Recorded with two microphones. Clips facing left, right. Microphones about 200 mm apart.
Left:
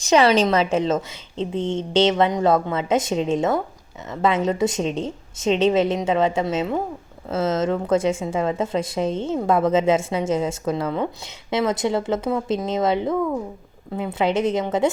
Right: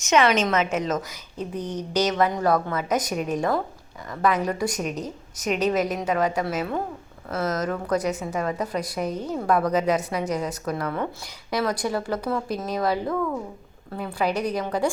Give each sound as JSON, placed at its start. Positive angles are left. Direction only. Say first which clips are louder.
{"t": 0.0, "sound": "speech", "louder": "left 4 dB", "side_deg": 35}